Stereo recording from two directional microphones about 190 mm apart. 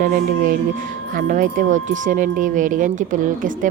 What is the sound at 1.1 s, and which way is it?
Speech, 45° right (ahead or behind).